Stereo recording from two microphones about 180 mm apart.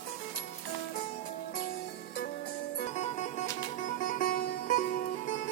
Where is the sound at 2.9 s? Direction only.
40° left (ahead or behind).